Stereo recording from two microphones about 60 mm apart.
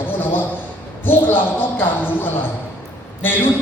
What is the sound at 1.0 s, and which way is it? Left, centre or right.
Speech, left.